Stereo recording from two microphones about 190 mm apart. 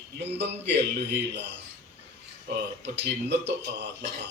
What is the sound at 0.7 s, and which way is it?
Speech, 65° right (ahead or behind).